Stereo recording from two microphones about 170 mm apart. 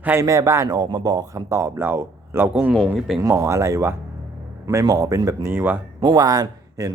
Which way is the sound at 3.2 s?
15° right (ahead or behind).